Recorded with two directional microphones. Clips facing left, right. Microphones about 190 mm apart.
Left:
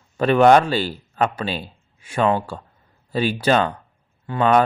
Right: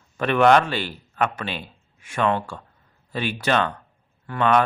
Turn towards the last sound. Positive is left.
turn(degrees=35)  # may be behind; listen again after turning